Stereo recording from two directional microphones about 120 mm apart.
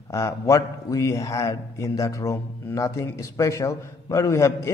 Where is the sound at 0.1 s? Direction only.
25° left (ahead or behind).